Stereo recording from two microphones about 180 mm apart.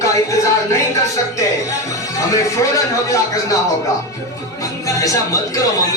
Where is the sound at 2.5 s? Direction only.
20° left (ahead or behind).